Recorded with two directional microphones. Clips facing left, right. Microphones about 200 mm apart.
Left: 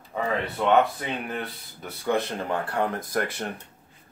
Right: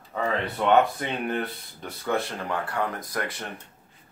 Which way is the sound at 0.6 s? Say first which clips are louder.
Right 1 dB; centre (ahead or behind).